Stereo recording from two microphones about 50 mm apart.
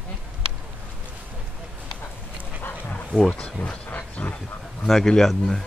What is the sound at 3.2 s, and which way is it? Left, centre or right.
Speech, centre.